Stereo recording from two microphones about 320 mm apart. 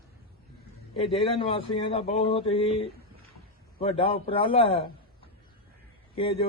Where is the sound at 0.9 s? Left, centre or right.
Centre.